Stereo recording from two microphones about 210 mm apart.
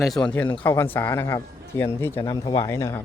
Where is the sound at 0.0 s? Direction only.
Centre (ahead or behind).